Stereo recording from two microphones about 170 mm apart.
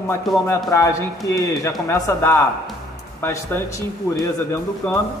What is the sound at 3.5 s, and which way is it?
Speech, 15° left (ahead or behind).